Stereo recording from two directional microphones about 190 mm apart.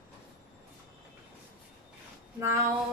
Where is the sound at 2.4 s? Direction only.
15° right (ahead or behind).